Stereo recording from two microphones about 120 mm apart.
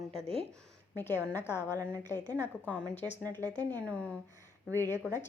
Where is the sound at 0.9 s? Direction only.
15° left (ahead or behind).